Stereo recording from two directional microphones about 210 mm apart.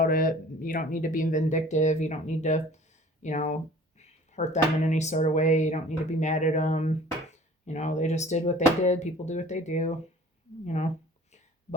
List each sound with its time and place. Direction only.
0.0 s speech: 40° left (ahead or behind)